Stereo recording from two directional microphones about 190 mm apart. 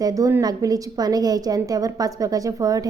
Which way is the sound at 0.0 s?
15° right (ahead or behind).